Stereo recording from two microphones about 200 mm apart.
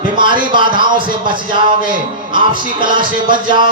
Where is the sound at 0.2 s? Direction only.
25° right (ahead or behind).